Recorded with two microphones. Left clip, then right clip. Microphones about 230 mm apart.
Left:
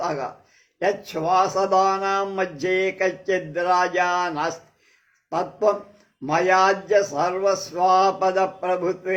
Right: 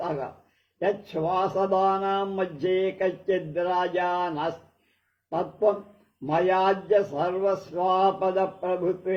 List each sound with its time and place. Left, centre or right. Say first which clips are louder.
0.8 s a man's voice: left 3 dB; left